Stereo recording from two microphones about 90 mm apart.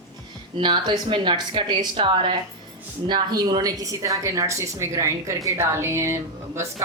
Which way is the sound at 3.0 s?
55° right (ahead or behind).